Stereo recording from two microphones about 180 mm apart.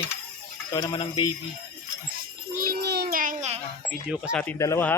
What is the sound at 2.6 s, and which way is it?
Music, 60° right (ahead or behind).